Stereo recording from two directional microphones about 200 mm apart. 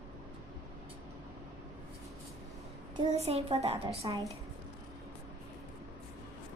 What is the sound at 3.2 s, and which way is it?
Speech, 30° right (ahead or behind).